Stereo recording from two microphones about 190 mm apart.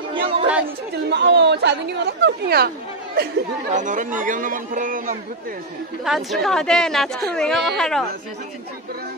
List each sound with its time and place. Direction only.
0.1 s chatter: 30° right (ahead or behind)
1.1 s speech: 65° right (ahead or behind)
3.7 s a man's voice: 40° right (ahead or behind)
6.0 s a woman's voice: centre (ahead or behind)